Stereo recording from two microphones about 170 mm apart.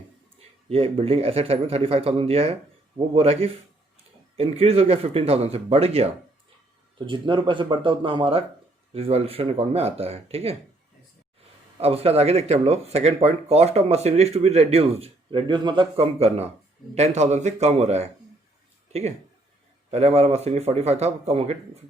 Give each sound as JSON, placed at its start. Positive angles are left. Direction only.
{"t": 0.7, "sound": "speech", "side_deg": -35}
{"t": 11.8, "sound": "speech", "side_deg": -35}
{"t": 19.9, "sound": "speech", "side_deg": -40}